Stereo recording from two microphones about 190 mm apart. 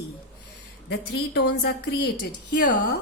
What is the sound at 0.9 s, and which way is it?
A woman's voice, 65° left (ahead or behind).